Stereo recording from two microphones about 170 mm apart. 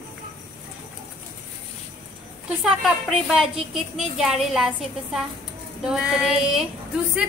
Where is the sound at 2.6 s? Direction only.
Centre (ahead or behind).